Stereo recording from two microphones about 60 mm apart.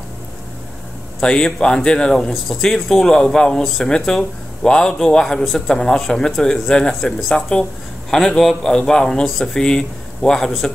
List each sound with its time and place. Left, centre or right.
1.2 s speech: centre
3.6 s speech: centre